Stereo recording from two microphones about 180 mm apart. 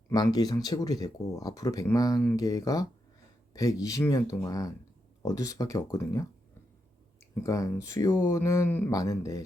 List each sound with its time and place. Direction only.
0.1 s speech: 20° left (ahead or behind)
7.4 s speech: 15° left (ahead or behind)